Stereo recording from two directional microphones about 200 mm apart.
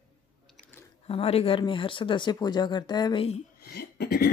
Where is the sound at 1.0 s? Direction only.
30° left (ahead or behind).